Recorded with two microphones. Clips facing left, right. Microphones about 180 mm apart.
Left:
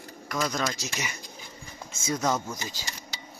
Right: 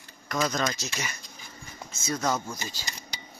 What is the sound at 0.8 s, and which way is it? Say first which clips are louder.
Speech: left 1 dB; 15° left (ahead or behind).